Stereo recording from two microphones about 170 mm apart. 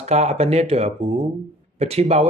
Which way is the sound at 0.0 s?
40° right (ahead or behind).